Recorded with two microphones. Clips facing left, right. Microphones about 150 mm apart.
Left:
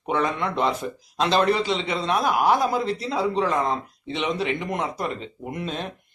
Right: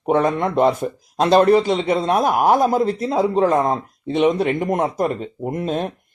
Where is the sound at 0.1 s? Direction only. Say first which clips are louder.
Right 7 dB; 45° right (ahead or behind).